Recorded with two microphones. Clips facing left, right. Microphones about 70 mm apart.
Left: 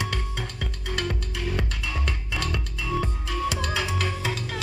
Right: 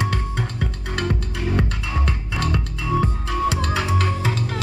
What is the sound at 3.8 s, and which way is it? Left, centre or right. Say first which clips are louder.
Music: right 5 dB; centre.